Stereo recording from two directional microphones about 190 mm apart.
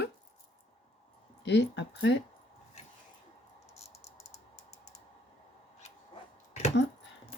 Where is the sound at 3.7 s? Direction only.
35° left (ahead or behind).